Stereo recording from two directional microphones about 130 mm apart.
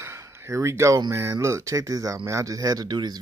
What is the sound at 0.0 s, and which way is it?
Speech, 20° right (ahead or behind).